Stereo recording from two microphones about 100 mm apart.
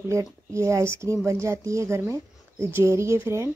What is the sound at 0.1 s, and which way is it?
Speech, 30° right (ahead or behind).